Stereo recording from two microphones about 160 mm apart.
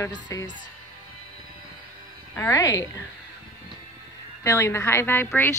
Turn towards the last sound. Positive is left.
turn(degrees=15)  # may be behind; listen again after turning